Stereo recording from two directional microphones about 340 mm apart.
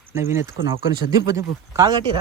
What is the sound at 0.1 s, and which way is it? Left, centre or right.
Speech, centre.